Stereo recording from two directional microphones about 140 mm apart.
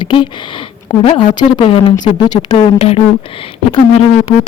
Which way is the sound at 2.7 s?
45° left (ahead or behind).